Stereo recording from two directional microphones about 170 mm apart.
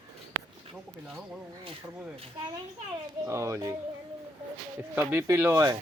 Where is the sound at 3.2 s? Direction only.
15° right (ahead or behind).